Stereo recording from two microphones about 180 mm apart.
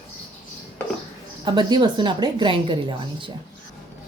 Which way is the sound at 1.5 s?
25° right (ahead or behind).